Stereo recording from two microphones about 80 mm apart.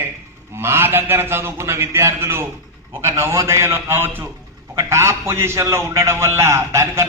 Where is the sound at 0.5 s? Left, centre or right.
Right.